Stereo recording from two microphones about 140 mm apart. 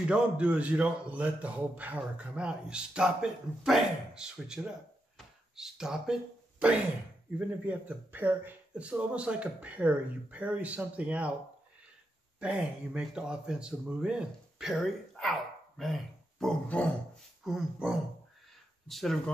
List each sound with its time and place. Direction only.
0.1 s a man's voice: 10° right (ahead or behind)
7.3 s a man's voice: 10° right (ahead or behind)
12.4 s a man's voice: 5° right (ahead or behind); by 16.9 s 10° left (ahead or behind)
17.4 s dog: 5° right (ahead or behind)
18.9 s a man's voice: centre (ahead or behind)